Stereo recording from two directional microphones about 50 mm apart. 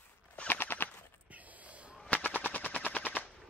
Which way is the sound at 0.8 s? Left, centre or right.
Right.